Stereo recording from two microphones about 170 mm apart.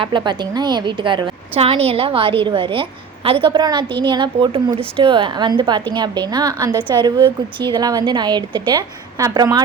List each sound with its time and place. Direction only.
0.0 s a woman's voice: 30° right (ahead or behind)